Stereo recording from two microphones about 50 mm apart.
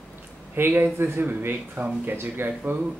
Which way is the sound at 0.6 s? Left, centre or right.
Right.